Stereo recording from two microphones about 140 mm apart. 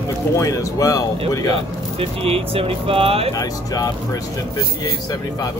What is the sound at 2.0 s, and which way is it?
Speech, 45° right (ahead or behind).